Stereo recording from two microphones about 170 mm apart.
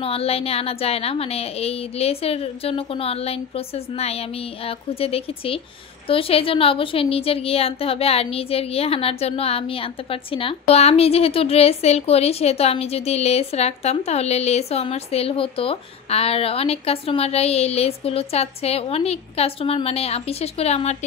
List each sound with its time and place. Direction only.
0.0 s a woman's voice: 35° left (ahead or behind)